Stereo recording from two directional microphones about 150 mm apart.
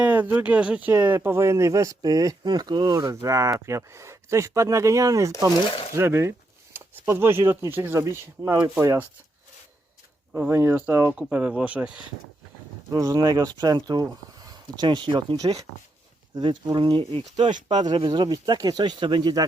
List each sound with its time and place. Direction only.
0.0 s speech: 10° right (ahead or behind)
10.3 s speech: 15° right (ahead or behind)
12.9 s speech: 25° right (ahead or behind)